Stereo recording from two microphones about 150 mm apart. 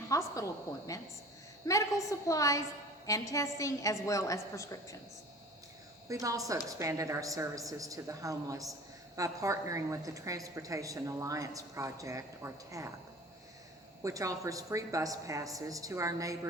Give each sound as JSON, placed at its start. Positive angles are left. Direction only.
{"t": 0.1, "sound": "a woman's voice", "side_deg": 20}
{"t": 6.1, "sound": "a woman's voice", "side_deg": -20}
{"t": 14.0, "sound": "a woman's voice", "side_deg": -20}